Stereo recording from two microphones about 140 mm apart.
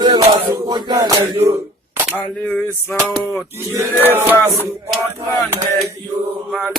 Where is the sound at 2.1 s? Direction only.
10° left (ahead or behind).